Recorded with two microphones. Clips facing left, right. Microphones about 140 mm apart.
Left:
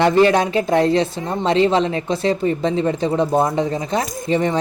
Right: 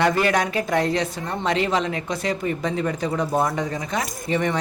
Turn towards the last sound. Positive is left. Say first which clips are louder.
# left 5 dB
turn(degrees=30)  # may be behind; listen again after turning